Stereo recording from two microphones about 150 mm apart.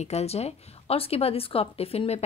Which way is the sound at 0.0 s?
45° left (ahead or behind).